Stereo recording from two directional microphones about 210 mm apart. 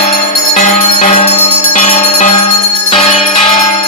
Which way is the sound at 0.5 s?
30° left (ahead or behind).